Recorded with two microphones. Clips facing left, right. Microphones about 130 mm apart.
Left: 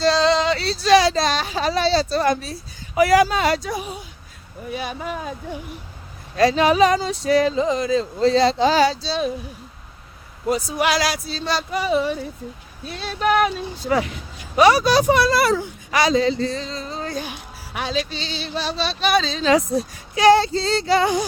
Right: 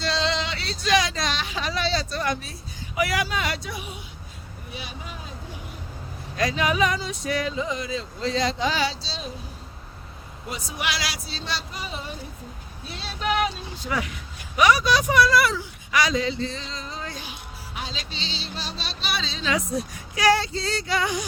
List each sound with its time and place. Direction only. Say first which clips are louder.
0.0 s speech: left 9 dB; 40° left (ahead or behind)
4.7 s speech: left 11 dB; 50° left (ahead or behind)
6.3 s speech: left 8 dB; 35° left (ahead or behind); by 9.3 s 60° left (ahead or behind)
10.5 s speech: left 10 dB; 45° left (ahead or behind)
11.7 s speech: left 14 dB; 70° left (ahead or behind)
13.0 s speech: left 6 dB; 50° left (ahead or behind)
13.8 s speech: left 7 dB; 35° left (ahead or behind)
17.7 s speech: left 10 dB; 65° left (ahead or behind)
19.1 s speech: left 9 dB; 45° left (ahead or behind)